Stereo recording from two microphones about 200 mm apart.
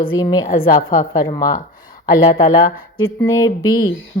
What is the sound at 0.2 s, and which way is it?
Speech, 20° left (ahead or behind).